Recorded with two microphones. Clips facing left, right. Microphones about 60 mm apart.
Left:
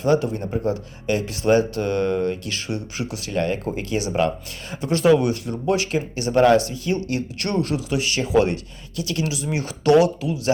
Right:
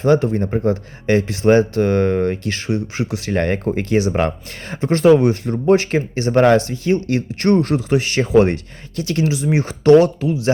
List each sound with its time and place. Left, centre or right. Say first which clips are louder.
0.0 s speech: right 5 dB; right
3.3 s speech: right 4 dB; right